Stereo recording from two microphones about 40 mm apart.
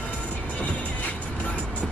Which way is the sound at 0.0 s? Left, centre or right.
Left.